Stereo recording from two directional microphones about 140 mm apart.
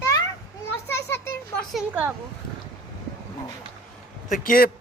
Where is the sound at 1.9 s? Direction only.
10° right (ahead or behind).